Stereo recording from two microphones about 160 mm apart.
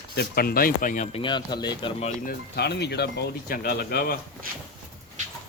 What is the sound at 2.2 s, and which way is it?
Speech, 90° left.